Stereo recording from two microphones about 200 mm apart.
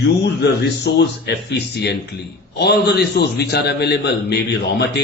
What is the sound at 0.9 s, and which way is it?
A man's voice, 55° left (ahead or behind).